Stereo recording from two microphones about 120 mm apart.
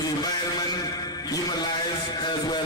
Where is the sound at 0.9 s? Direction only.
30° left (ahead or behind).